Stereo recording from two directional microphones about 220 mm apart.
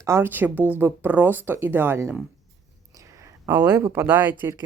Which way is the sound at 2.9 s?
15° right (ahead or behind).